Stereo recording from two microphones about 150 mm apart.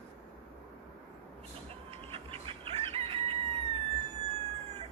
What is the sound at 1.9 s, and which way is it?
Chicken, 35° right (ahead or behind).